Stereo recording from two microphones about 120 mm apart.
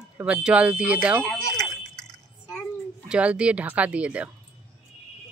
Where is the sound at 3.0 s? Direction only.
10° right (ahead or behind).